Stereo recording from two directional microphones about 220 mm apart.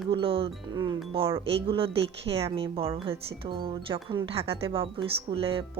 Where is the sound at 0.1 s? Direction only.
25° right (ahead or behind).